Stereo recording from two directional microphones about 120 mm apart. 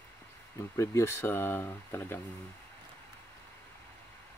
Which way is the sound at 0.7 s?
25° left (ahead or behind).